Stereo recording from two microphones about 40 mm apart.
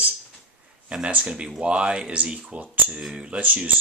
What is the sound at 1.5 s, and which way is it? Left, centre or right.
Speech, right.